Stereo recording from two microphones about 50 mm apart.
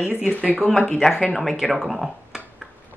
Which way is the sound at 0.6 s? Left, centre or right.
Centre.